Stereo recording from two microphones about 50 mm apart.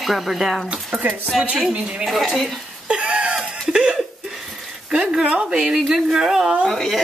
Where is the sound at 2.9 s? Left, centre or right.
Right.